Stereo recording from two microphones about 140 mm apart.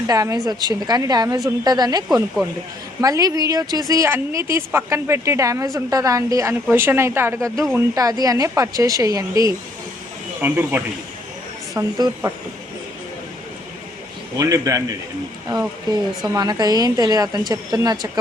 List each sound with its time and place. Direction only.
0.1 s a woman's voice: 25° right (ahead or behind)
10.4 s speech: 15° right (ahead or behind)
11.8 s a woman's voice: 30° right (ahead or behind)
14.3 s a woman's voice: 25° right (ahead or behind)
15.9 s a woman's voice: 30° right (ahead or behind)